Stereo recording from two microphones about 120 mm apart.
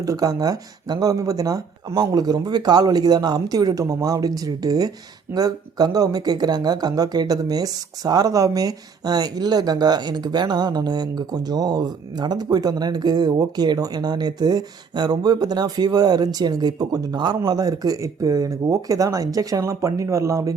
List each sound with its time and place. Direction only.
0.0 s speech: 30° right (ahead or behind)